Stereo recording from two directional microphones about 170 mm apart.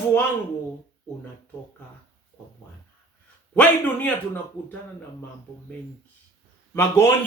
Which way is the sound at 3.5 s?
10° left (ahead or behind).